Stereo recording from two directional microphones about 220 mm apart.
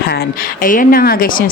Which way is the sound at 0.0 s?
45° left (ahead or behind).